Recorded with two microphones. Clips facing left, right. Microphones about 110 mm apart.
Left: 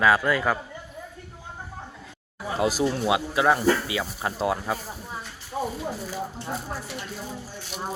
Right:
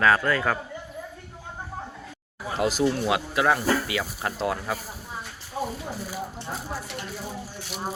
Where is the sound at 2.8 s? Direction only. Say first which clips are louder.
Even; 20° left (ahead or behind).